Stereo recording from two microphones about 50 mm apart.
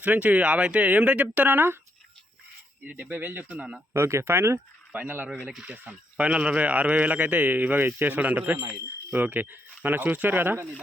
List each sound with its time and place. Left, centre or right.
0.0 s speech: right
3.0 s speech: right
3.9 s speech: right
4.9 s speech: right
5.9 s speech: right